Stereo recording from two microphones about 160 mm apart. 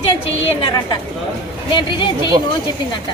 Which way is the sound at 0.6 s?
25° left (ahead or behind).